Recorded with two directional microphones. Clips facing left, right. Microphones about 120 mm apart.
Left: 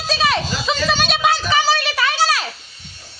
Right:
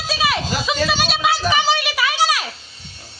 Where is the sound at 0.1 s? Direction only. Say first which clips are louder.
Left 2 dB; 10° right (ahead or behind).